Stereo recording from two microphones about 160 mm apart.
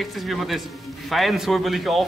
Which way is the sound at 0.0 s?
Centre (ahead or behind).